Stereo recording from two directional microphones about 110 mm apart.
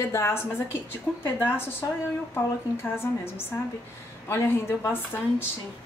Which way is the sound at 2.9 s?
20° left (ahead or behind).